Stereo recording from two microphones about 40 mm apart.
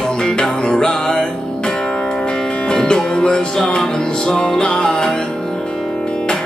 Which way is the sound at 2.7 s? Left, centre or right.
Centre.